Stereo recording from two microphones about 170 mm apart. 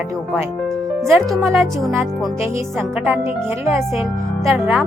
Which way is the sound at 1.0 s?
Centre (ahead or behind).